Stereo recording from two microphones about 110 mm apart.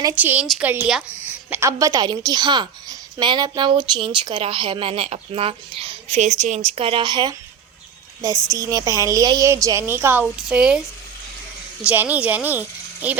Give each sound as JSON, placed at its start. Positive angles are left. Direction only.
{"t": 0.2, "sound": "speech", "side_deg": -15}
{"t": 1.5, "sound": "a woman's voice", "side_deg": -20}
{"t": 1.8, "sound": "a woman's voice", "side_deg": -35}
{"t": 6.1, "sound": "speech", "side_deg": -90}
{"t": 8.5, "sound": "a woman's voice", "side_deg": -30}
{"t": 11.8, "sound": "speech", "side_deg": -15}